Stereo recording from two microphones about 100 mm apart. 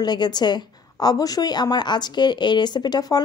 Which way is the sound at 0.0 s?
45° left (ahead or behind).